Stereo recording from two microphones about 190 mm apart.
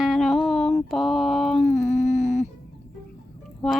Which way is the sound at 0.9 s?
Centre (ahead or behind).